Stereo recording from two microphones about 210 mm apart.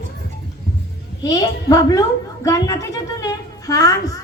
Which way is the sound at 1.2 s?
20° left (ahead or behind).